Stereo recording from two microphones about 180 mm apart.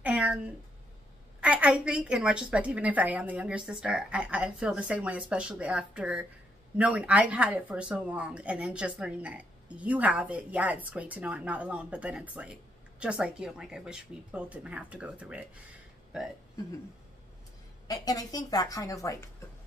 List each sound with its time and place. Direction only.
0.0 s a sound: 10° right (ahead or behind)
1.4 s speech: 10° right (ahead or behind)
17.8 s speech: 20° left (ahead or behind)